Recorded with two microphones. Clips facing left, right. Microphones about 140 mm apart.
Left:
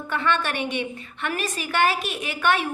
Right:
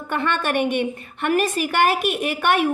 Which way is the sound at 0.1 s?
55° right (ahead or behind).